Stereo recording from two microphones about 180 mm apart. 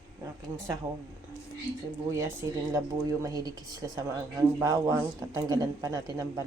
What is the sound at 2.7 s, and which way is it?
Speech, 20° right (ahead or behind).